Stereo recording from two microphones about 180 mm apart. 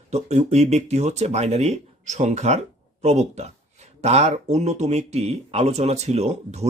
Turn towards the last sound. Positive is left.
turn(degrees=-40)  # may be behind; listen again after turning